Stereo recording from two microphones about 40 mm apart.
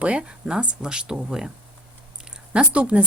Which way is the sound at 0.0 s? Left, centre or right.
Right.